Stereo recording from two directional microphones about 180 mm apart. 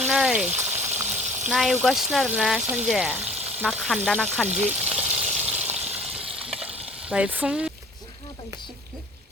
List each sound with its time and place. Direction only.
0.0 s frying: 5° right (ahead or behind)
1.1 s speech: 10° right (ahead or behind)
4.4 s a sound: 10° right (ahead or behind)
6.7 s frying: 35° right (ahead or behind)
7.0 s speech: 5° right (ahead or behind)